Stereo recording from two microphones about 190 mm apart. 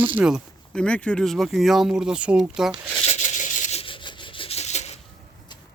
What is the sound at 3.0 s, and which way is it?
Rub, 35° left (ahead or behind).